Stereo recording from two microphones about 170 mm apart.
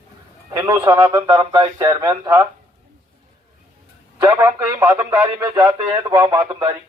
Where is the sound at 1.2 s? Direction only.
25° right (ahead or behind).